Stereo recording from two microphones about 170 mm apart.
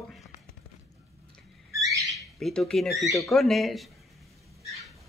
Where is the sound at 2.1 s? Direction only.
Centre (ahead or behind).